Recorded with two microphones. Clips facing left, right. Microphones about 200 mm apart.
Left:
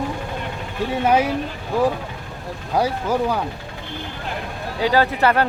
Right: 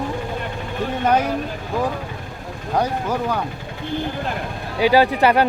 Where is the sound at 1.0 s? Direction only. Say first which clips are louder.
Left 1 dB; 5° left (ahead or behind).